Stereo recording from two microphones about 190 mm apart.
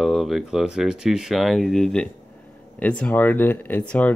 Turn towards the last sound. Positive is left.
turn(degrees=10)  # may be behind; listen again after turning